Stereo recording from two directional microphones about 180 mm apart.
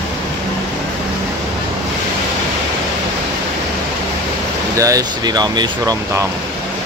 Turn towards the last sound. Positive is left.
turn(degrees=-20)  # may be behind; listen again after turning